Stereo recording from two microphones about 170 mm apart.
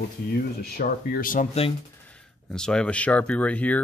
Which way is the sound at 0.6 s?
65° left (ahead or behind).